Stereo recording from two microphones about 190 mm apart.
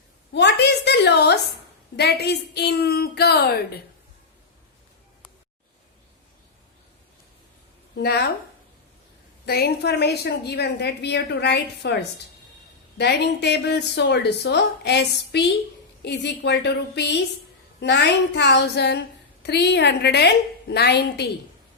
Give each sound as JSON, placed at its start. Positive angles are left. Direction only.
{"t": 0.3, "sound": "a woman's voice", "side_deg": 60}
{"t": 7.9, "sound": "a woman's voice", "side_deg": 60}
{"t": 9.5, "sound": "a woman's voice", "side_deg": 55}